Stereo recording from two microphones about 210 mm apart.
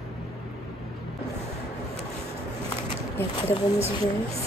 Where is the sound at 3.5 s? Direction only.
30° left (ahead or behind).